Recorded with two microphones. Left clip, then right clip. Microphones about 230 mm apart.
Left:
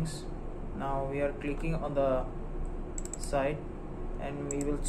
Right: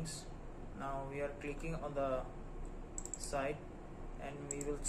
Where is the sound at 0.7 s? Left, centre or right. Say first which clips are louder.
Left 9 dB; centre.